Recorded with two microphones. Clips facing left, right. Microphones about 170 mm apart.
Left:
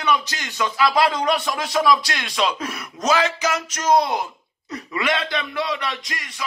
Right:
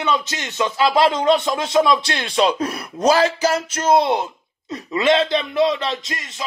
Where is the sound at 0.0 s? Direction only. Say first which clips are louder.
Right 1 dB; 20° right (ahead or behind).